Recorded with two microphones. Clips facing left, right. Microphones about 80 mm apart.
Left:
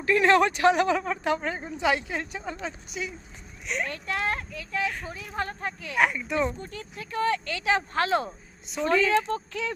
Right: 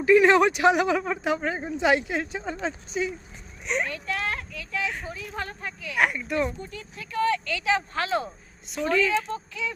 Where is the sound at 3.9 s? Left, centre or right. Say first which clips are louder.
Left 1 dB; left.